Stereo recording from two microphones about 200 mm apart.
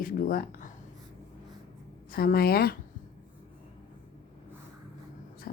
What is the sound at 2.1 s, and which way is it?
Speech, 50° left (ahead or behind).